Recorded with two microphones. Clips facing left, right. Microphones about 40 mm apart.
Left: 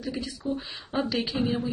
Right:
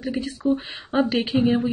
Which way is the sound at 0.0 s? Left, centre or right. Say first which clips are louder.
Right 7 dB; right.